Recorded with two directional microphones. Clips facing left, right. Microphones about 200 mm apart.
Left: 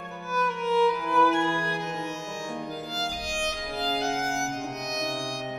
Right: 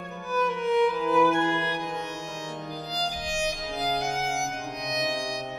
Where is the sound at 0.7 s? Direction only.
15° right (ahead or behind).